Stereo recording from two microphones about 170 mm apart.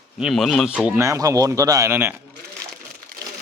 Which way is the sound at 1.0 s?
15° right (ahead or behind).